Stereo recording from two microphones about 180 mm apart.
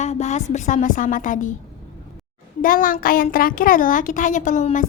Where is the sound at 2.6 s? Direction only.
50° left (ahead or behind).